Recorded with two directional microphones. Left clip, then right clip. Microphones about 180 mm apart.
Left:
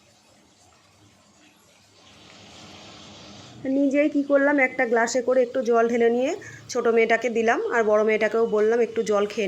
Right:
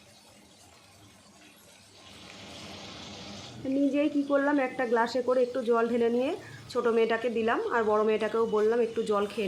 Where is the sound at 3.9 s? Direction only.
25° left (ahead or behind).